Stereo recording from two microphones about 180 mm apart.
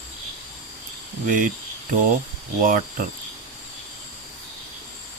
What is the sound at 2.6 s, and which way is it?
Speech, 50° right (ahead or behind).